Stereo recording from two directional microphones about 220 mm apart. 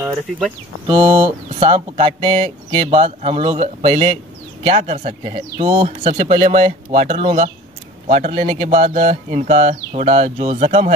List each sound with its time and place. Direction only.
0.8 s speech: 20° right (ahead or behind)